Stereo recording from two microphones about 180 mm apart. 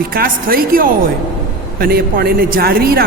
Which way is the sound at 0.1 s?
55° right (ahead or behind).